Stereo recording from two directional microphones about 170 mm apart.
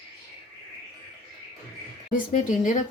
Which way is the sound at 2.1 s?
50° left (ahead or behind).